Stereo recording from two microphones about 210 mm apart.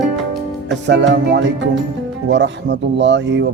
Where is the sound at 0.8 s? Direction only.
55° right (ahead or behind).